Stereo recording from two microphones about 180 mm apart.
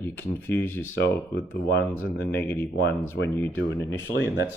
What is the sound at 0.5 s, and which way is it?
Speech, 10° left (ahead or behind).